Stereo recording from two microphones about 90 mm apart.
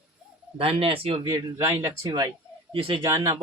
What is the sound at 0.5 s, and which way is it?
Speech, 90° right.